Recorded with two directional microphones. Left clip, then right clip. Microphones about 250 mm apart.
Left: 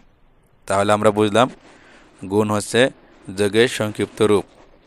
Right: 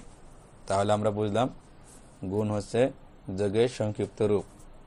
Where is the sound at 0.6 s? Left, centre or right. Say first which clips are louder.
Left 10 dB; left.